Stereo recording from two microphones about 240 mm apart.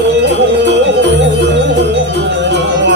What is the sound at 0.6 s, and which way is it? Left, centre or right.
Music, right.